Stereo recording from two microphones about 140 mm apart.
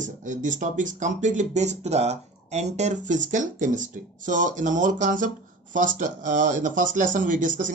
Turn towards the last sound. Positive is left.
turn(degrees=-70)  # may be behind; listen again after turning